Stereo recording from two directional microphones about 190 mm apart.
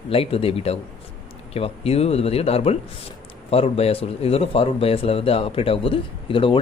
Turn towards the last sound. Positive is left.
turn(degrees=25)  # may be behind; listen again after turning